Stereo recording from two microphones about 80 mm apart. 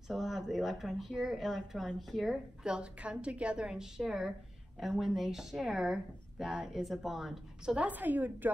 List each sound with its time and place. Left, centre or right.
0.1 s speech: centre
2.6 s a woman's voice: centre
7.7 s a woman's voice: centre